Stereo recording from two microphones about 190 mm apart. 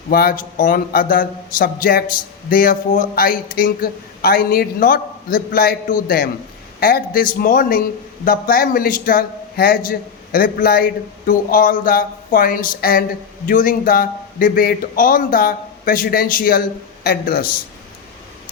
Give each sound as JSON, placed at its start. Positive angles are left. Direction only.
{"t": 0.1, "sound": "speech", "side_deg": 50}